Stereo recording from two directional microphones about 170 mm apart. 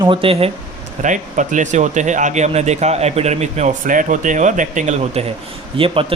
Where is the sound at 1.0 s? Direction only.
50° right (ahead or behind).